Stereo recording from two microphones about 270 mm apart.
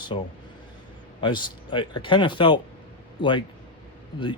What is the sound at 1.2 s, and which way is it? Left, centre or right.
Speech, centre.